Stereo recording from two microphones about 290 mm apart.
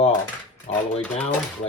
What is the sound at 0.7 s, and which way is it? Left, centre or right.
Speech, left.